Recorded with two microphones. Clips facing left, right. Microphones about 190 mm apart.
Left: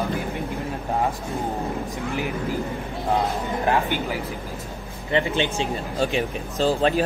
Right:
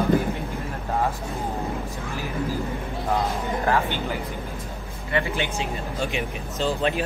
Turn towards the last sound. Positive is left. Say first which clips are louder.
# left 4 dB
turn(degrees=35)  # may be behind; listen again after turning